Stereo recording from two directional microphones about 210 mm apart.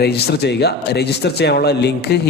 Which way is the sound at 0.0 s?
50° left (ahead or behind).